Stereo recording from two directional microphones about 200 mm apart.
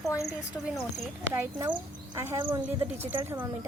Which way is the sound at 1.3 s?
15° right (ahead or behind).